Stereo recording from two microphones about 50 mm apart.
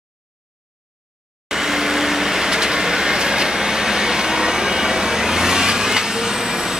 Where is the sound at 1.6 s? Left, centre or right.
Centre.